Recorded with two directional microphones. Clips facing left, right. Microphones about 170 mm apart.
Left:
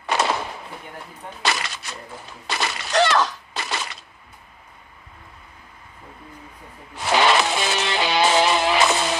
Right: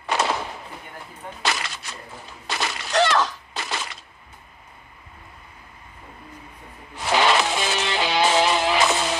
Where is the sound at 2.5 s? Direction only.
70° left (ahead or behind).